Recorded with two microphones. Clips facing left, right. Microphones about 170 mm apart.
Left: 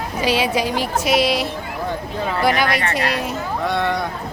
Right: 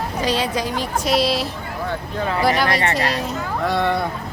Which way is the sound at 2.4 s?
Centre (ahead or behind).